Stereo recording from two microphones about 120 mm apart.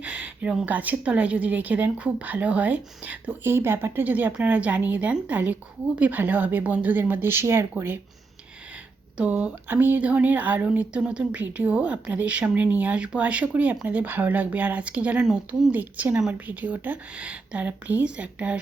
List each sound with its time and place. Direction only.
0.0 s speech: 10° right (ahead or behind)
9.1 s speech: 10° right (ahead or behind)